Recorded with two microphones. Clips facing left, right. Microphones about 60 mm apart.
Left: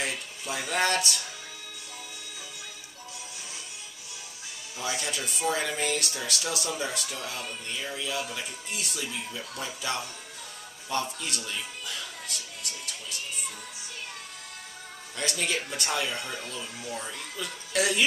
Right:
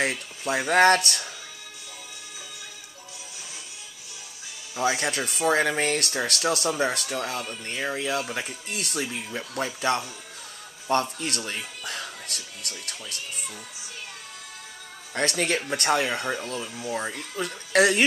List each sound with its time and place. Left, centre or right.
0.0 s speech: right
4.7 s speech: right
15.1 s speech: right